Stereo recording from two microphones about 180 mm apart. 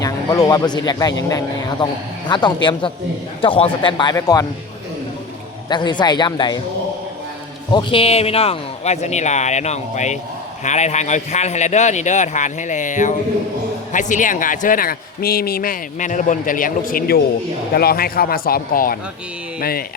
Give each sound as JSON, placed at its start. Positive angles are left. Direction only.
{"t": 0.0, "sound": "speech", "side_deg": 20}
{"t": 5.6, "sound": "speech", "side_deg": 25}
{"t": 7.7, "sound": "a man's voice", "side_deg": 25}